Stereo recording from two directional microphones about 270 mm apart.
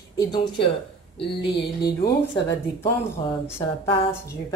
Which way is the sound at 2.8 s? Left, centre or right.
Centre.